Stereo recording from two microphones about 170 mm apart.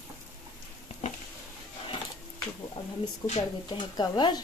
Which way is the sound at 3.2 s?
20° left (ahead or behind).